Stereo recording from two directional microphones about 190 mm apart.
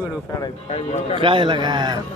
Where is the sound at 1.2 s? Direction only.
25° right (ahead or behind).